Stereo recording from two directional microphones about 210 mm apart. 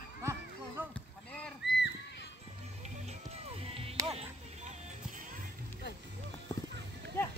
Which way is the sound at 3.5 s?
25° right (ahead or behind).